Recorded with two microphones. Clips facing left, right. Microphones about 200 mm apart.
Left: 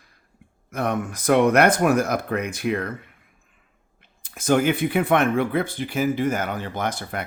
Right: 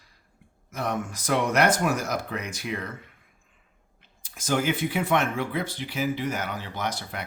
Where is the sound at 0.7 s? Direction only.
60° left (ahead or behind).